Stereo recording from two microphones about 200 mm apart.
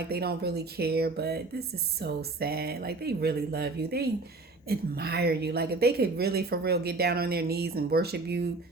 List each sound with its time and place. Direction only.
0.1 s speech: 50° right (ahead or behind)